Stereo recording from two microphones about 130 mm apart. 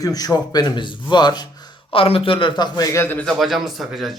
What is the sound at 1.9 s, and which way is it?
A man's voice, 45° left (ahead or behind).